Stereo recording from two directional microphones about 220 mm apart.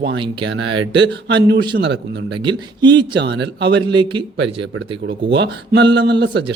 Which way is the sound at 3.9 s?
20° right (ahead or behind).